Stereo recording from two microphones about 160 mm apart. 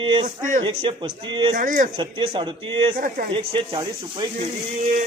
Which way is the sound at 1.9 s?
30° right (ahead or behind).